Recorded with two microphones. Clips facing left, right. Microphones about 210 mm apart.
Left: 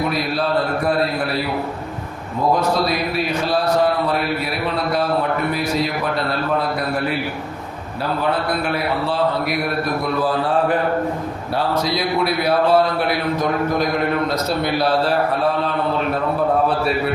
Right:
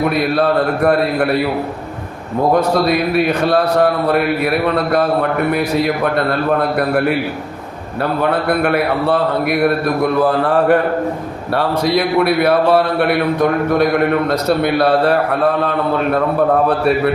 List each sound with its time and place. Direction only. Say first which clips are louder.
2.6 s speech: right 5 dB; 60° right (ahead or behind)
8.2 s speech: right 6 dB; 60° right (ahead or behind)